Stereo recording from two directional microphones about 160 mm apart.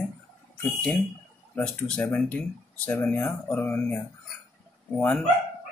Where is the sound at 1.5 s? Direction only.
5° left (ahead or behind).